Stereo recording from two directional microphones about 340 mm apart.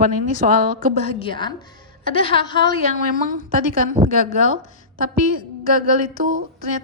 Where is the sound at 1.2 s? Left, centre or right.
Centre.